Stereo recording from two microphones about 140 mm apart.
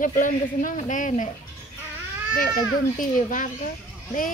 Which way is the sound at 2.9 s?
70° left (ahead or behind).